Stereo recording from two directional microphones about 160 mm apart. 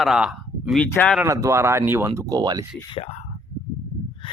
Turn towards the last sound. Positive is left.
turn(degrees=35)  # may be behind; listen again after turning